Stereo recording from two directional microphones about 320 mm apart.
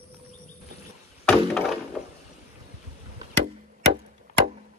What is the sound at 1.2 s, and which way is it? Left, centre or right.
Wood, centre.